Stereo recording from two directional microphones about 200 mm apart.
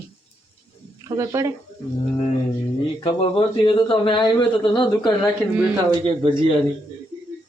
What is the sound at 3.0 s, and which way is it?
A man's voice, 25° left (ahead or behind).